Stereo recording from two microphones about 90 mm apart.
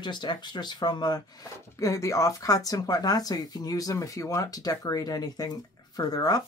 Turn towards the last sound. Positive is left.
turn(degrees=45)  # may be behind; listen again after turning